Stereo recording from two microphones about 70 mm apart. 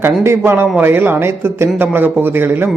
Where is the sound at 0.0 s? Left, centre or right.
Right.